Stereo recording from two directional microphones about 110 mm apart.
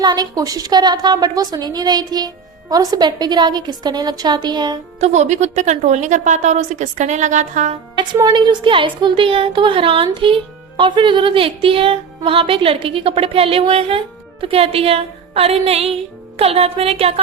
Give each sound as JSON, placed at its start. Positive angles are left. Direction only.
{"t": 0.0, "sound": "a woman's voice", "side_deg": -35}
{"t": 4.9, "sound": "speech", "side_deg": -85}
{"t": 8.3, "sound": "a woman's voice", "side_deg": -45}